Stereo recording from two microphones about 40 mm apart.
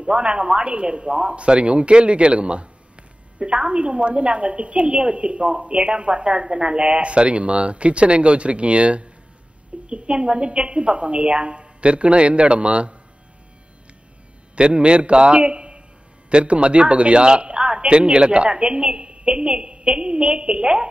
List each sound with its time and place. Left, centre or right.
0.0 s a woman's voice: right
14.5 s a man's voice: right